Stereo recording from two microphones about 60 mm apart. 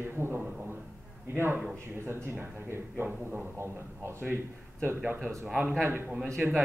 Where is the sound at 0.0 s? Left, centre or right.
Right.